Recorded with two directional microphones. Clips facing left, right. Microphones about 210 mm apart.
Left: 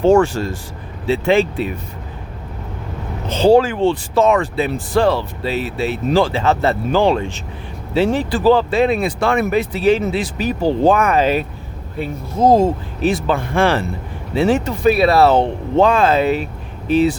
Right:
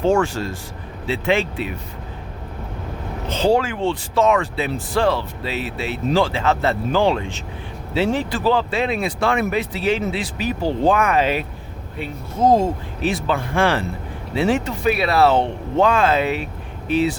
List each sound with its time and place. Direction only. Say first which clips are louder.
0.1 s speech: left 6 dB; 40° left (ahead or behind)
3.4 s speech: left 6 dB; 35° left (ahead or behind)